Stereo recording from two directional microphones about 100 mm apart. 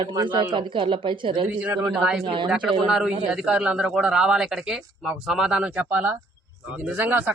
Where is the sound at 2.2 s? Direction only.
55° right (ahead or behind).